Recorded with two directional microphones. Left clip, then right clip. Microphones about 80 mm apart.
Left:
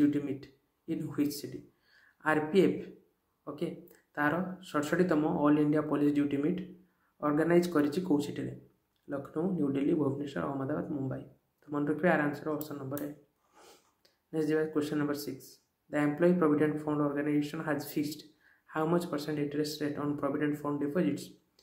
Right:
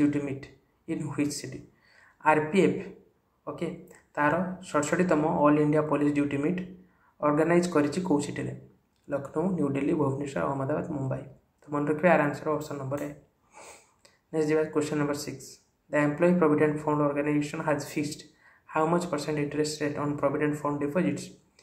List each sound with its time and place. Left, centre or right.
0.0 s speech: left
14.3 s speech: centre